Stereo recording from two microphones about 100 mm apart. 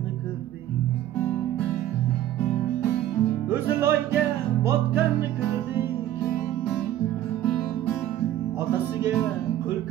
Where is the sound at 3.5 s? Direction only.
25° right (ahead or behind).